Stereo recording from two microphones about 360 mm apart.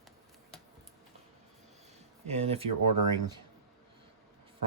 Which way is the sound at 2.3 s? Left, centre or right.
Centre.